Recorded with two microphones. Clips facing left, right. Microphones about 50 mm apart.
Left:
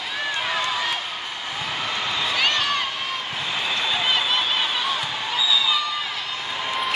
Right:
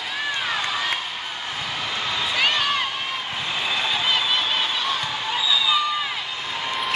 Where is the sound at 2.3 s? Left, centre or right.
Centre.